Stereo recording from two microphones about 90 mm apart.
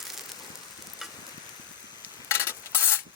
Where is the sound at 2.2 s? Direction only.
25° left (ahead or behind).